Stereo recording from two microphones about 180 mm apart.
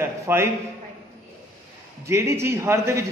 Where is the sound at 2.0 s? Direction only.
15° right (ahead or behind).